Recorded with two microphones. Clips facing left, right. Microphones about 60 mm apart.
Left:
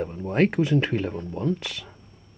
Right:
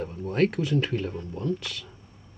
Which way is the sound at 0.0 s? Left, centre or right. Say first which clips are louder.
Left 2 dB; left.